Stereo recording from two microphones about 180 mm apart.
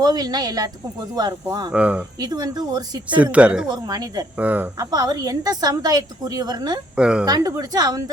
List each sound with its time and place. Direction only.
0.0 s a woman's voice: 20° right (ahead or behind)
1.7 s speech: 5° right (ahead or behind)
2.2 s a woman's voice: 20° right (ahead or behind)
3.3 s speech: 5° right (ahead or behind)
3.7 s a woman's voice: 20° right (ahead or behind)
4.4 s speech: 10° right (ahead or behind)
4.9 s a woman's voice: 20° right (ahead or behind)
6.9 s speech: 5° right (ahead or behind)
7.3 s a woman's voice: 20° right (ahead or behind)